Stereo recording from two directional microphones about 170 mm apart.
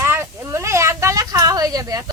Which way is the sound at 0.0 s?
15° right (ahead or behind).